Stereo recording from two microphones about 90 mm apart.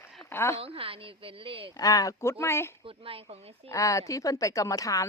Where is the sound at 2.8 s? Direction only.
90° right.